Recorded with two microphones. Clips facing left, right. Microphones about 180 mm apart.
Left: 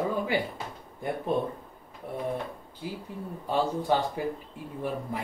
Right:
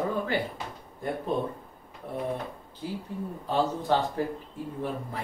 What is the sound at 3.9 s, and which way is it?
Speech, 15° left (ahead or behind).